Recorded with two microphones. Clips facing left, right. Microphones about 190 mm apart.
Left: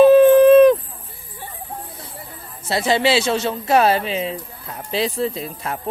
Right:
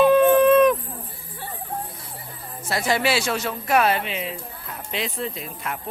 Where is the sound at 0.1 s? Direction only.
30° left (ahead or behind).